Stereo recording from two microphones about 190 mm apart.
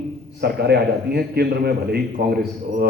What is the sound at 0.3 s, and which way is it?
A man's voice, 55° right (ahead or behind).